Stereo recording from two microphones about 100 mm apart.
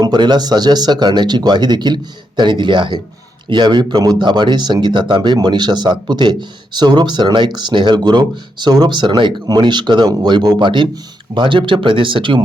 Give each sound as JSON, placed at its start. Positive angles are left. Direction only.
{"t": 0.0, "sound": "speech", "side_deg": -45}